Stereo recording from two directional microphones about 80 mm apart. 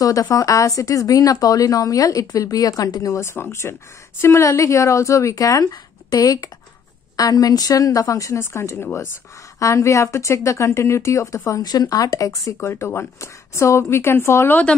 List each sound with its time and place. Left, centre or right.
0.0 s speech: left
9.6 s speech: left
11.6 s speech: left
12.5 s speech: left